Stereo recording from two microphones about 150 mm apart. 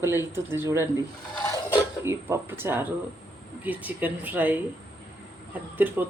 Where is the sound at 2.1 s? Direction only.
15° right (ahead or behind).